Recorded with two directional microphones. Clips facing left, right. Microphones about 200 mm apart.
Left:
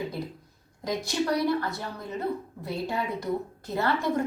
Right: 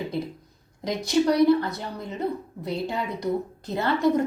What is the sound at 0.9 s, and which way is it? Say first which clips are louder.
A woman's voice: right 5 dB; 20° right (ahead or behind).